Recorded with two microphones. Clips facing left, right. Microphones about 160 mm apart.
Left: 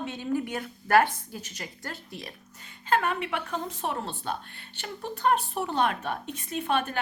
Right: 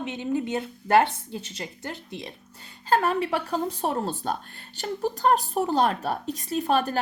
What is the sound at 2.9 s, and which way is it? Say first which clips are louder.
A woman's voice: right 4 dB; 35° right (ahead or behind).